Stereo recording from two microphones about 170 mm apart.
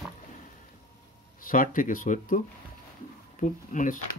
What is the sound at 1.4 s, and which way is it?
Speech, 55° left (ahead or behind).